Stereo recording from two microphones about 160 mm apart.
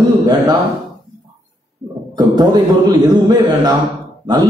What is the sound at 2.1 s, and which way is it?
A man's voice, 25° right (ahead or behind).